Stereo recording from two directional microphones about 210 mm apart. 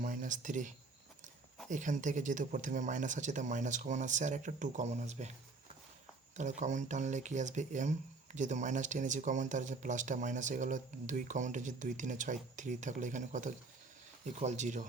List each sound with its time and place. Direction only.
0.0 s a sound: 40° right (ahead or behind)
1.7 s speech: 35° right (ahead or behind)
6.3 s speech: 35° right (ahead or behind)